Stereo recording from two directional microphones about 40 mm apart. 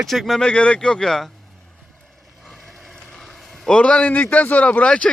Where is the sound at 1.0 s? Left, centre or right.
Centre.